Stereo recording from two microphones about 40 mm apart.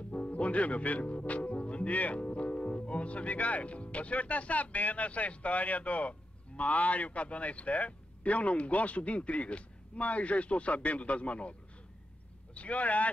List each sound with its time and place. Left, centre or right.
0.1 s speech: left
12.5 s speech: left